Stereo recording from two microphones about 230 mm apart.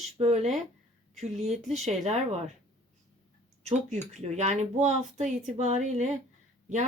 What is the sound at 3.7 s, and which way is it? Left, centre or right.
A woman's voice, right.